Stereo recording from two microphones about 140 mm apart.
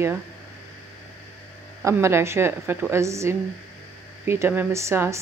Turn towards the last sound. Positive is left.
turn(degrees=-20)  # may be behind; listen again after turning